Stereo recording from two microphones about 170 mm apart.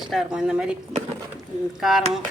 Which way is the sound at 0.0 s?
Centre (ahead or behind).